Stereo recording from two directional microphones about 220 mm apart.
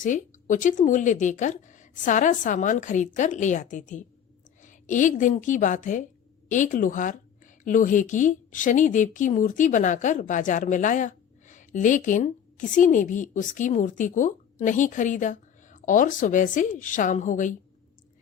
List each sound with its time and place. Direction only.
0.0 s speech: 35° left (ahead or behind)